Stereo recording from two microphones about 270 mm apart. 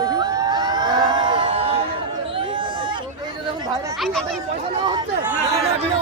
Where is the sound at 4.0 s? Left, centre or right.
Centre.